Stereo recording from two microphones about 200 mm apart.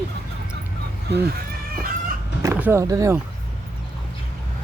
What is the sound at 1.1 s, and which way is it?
Speech, 55° right (ahead or behind).